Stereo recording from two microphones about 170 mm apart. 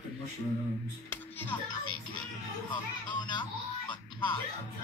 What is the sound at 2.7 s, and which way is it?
Music, 25° left (ahead or behind).